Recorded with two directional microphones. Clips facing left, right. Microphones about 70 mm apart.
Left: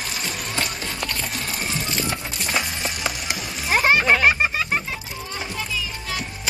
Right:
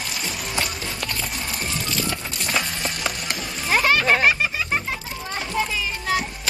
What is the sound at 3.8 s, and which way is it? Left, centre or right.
Music, left.